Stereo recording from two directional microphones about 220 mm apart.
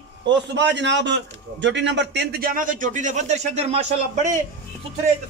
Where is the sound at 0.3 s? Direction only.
50° right (ahead or behind); by 4.4 s 35° right (ahead or behind).